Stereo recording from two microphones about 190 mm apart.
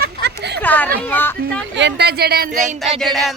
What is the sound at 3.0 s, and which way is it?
Speech, centre (ahead or behind).